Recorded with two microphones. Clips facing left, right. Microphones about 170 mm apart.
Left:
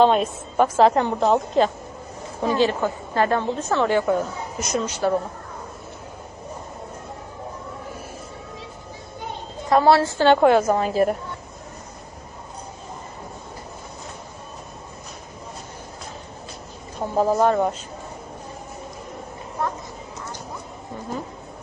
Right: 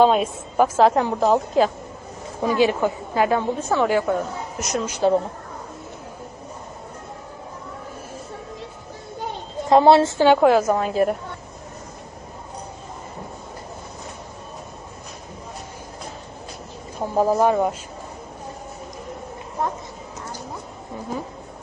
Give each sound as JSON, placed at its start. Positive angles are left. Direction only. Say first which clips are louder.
{"t": 0.0, "sound": "a woman's voice", "louder": "right 1 dB", "side_deg": -5}
{"t": 4.9, "sound": "a woman's voice", "louder": "right 5 dB", "side_deg": -20}
{"t": 9.6, "sound": "a woman's voice", "louder": "right 3 dB", "side_deg": -20}
{"t": 10.2, "sound": "a woman's voice", "louder": "left 1 dB", "side_deg": -5}
{"t": 17.0, "sound": "a woman's voice", "louder": "right 1 dB", "side_deg": -10}